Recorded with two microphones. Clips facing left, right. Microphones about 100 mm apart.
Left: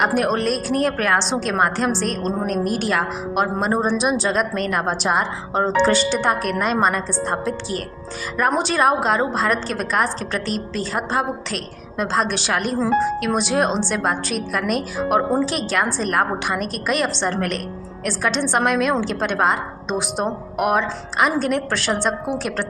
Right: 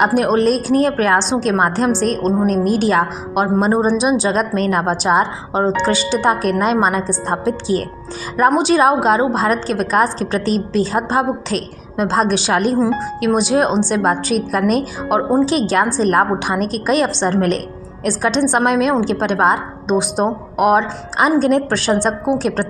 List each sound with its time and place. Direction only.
0.0 s a woman's voice: 20° right (ahead or behind)